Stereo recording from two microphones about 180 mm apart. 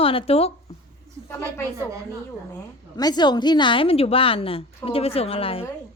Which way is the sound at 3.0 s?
25° left (ahead or behind).